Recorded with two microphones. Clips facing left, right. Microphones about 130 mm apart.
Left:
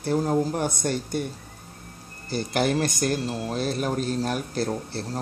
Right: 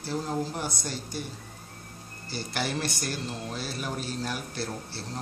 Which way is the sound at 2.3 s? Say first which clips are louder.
Left 8 dB; 50° left (ahead or behind).